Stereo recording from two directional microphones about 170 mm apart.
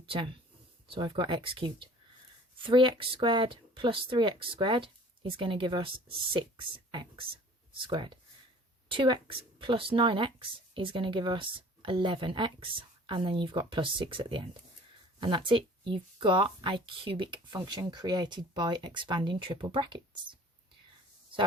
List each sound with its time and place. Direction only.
0.0 s speech: 30° right (ahead or behind)